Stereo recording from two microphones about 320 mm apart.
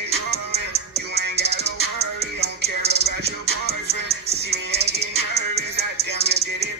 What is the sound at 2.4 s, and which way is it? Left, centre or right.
Music, right.